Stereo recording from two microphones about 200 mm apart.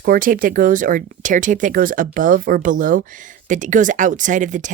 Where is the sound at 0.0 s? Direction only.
45° right (ahead or behind).